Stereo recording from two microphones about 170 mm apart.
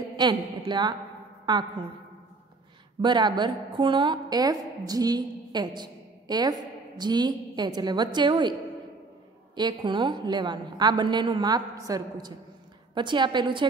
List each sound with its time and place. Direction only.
0.7 s a woman's voice: 25° right (ahead or behind)
3.0 s a woman's voice: 25° right (ahead or behind)
9.6 s a woman's voice: 25° right (ahead or behind)